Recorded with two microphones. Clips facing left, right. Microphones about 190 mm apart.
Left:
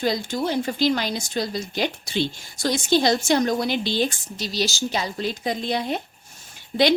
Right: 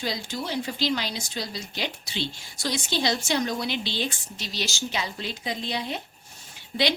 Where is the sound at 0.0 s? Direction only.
50° left (ahead or behind).